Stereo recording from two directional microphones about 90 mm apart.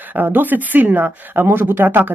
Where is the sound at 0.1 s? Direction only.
20° right (ahead or behind).